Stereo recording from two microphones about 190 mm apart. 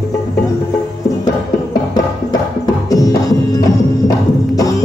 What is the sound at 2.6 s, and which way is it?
Music, 20° left (ahead or behind).